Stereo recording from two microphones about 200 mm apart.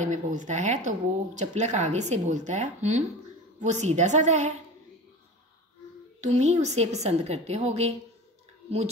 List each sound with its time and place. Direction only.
0.0 s speech: 40° right (ahead or behind)
6.2 s speech: 35° right (ahead or behind)